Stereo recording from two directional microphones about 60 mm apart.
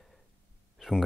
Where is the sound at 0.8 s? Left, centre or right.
Centre.